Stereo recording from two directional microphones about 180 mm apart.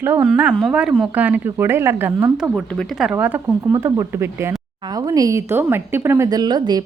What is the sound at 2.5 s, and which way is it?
Speech, centre (ahead or behind).